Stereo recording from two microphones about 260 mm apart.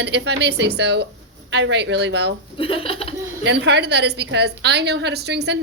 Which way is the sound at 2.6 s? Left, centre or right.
Left.